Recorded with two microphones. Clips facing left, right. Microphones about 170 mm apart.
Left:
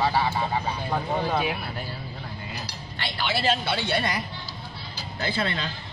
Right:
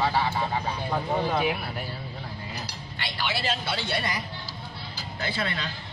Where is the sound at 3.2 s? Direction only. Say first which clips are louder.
Left 4 dB; 60° left (ahead or behind).